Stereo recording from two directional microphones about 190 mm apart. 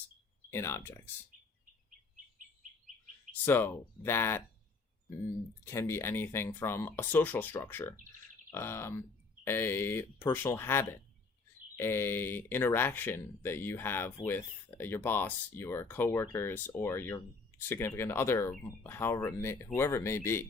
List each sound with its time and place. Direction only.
0.5 s speech: 10° left (ahead or behind)
3.4 s speech: 10° left (ahead or behind)
5.6 s speech: 15° left (ahead or behind)